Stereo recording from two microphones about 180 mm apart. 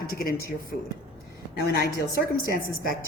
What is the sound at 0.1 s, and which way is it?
Speech, 55° left (ahead or behind).